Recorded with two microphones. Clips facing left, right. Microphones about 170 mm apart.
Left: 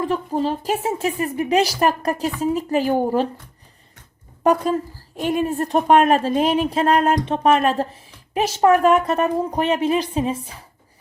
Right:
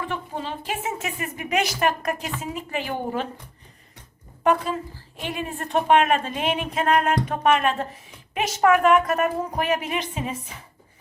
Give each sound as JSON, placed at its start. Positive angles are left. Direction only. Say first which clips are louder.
{"t": 0.0, "sound": "a woman's voice", "louder": "left 9 dB", "side_deg": 40}
{"t": 4.4, "sound": "a woman's voice", "louder": "left 4 dB", "side_deg": 40}